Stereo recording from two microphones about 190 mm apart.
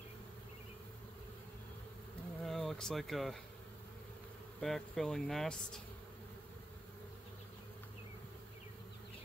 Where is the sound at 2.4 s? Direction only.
Centre (ahead or behind).